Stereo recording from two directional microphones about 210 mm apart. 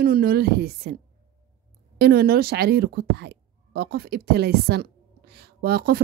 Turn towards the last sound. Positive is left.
turn(degrees=-45)  # may be behind; listen again after turning